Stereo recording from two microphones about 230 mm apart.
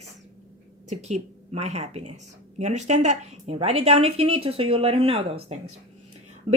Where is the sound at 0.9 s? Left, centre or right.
Right.